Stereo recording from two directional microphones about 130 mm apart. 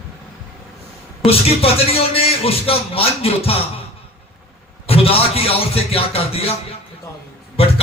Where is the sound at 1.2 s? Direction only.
50° left (ahead or behind).